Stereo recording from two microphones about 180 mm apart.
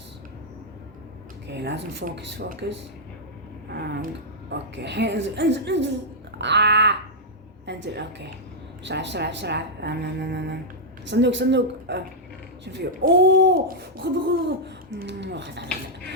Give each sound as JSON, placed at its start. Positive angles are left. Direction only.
{"t": 1.5, "sound": "speech", "side_deg": -75}
{"t": 3.7, "sound": "a sound", "side_deg": -60}
{"t": 4.4, "sound": "speech", "side_deg": -75}
{"t": 15.0, "sound": "speech", "side_deg": -75}